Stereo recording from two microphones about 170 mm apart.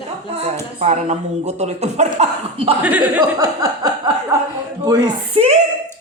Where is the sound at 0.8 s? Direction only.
40° right (ahead or behind).